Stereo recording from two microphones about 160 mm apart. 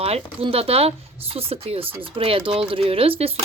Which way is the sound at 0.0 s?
40° right (ahead or behind).